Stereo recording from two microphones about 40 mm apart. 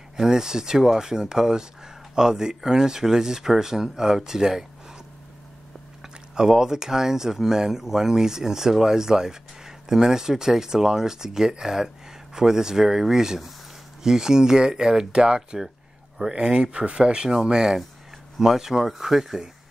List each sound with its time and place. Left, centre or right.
0.2 s speech: centre
6.0 s speech: centre